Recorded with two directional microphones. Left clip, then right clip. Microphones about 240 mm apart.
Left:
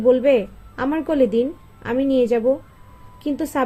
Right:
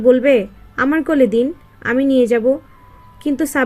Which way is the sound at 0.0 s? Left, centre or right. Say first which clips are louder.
Right 3 dB; right.